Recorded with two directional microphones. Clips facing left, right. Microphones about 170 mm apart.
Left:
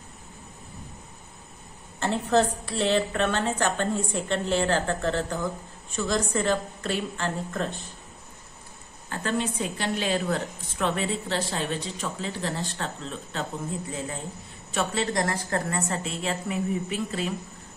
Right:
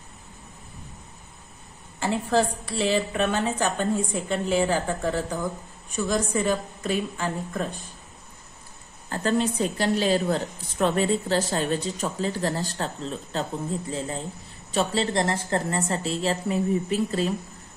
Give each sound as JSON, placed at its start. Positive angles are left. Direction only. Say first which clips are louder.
{"t": 2.0, "sound": "a woman's voice", "louder": "even", "side_deg": -5}
{"t": 9.1, "sound": "a woman's voice", "louder": "right 4 dB", "side_deg": -35}